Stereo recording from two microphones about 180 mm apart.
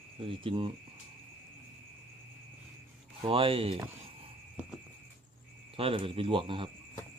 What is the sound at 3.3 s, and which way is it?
Speech, 30° right (ahead or behind).